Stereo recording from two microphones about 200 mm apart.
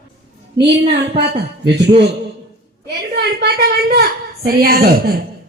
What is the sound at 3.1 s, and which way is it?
A woman's voice, 55° right (ahead or behind).